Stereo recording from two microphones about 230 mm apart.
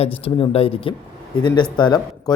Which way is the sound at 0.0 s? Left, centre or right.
Left.